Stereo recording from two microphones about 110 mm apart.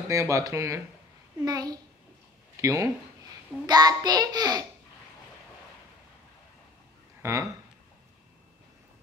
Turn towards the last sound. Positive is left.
turn(degrees=-25)  # may be behind; listen again after turning